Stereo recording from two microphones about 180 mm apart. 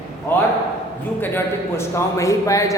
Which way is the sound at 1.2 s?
15° left (ahead or behind).